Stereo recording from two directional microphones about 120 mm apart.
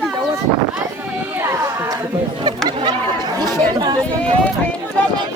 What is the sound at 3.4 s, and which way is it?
Chatter, 35° right (ahead or behind).